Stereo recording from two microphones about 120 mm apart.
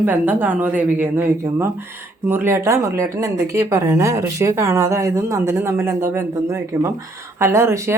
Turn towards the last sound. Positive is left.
turn(degrees=-20)  # may be behind; listen again after turning